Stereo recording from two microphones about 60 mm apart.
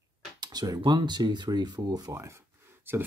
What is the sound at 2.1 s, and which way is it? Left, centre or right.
Speech, right.